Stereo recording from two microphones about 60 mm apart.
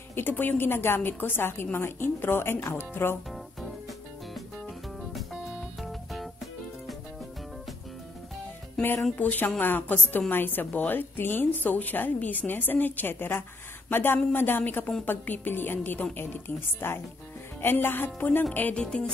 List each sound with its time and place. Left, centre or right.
0.1 s a woman's voice: left
5.1 s music: centre
9.1 s a woman's voice: left
18.8 s speech: centre